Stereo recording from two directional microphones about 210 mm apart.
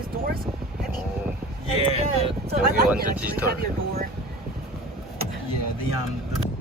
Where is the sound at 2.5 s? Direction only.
50° right (ahead or behind).